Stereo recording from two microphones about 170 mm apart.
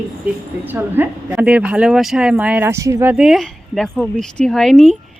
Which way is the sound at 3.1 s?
Centre (ahead or behind).